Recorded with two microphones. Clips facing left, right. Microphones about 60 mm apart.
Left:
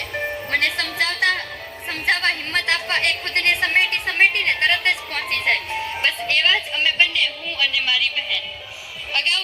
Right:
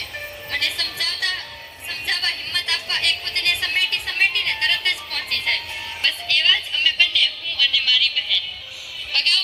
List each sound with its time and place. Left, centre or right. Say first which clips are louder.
0.5 s music: left 4 dB; left
1.9 s a sound: left 6 dB; left
9.1 s speech: left 1 dB; left